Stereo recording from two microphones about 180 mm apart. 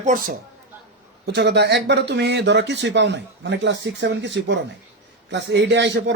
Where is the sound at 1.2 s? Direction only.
65° right (ahead or behind).